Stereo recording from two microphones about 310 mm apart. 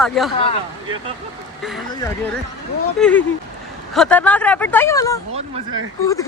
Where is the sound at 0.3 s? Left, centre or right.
Centre.